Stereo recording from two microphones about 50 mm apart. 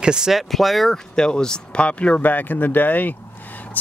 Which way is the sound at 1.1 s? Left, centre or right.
Centre.